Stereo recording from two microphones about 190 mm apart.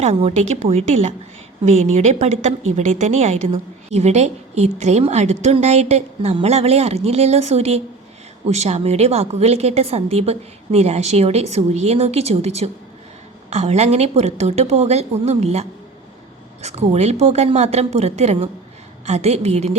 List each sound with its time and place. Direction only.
0.0 s a woman's voice: 30° right (ahead or behind)